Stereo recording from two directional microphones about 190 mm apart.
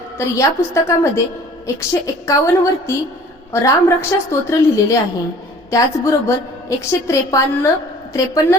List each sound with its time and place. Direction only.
0.2 s a woman's voice: 15° left (ahead or behind)